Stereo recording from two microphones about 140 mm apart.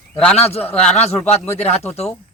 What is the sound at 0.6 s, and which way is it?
Speech, 10° left (ahead or behind).